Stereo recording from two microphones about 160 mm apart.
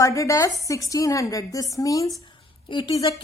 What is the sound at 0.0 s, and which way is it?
A woman's voice, 20° left (ahead or behind).